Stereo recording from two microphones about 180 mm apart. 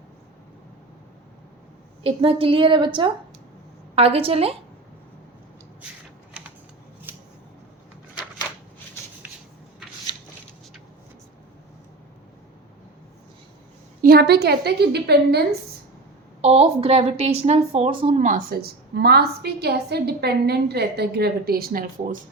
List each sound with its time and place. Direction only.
2.0 s a woman's voice: 30° right (ahead or behind)
7.1 s a sound: 10° right (ahead or behind)
14.0 s a woman's voice: 60° right (ahead or behind)
16.4 s a woman's voice: 35° right (ahead or behind)